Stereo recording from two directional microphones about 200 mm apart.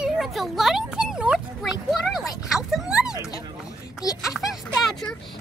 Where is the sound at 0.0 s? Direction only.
Centre (ahead or behind).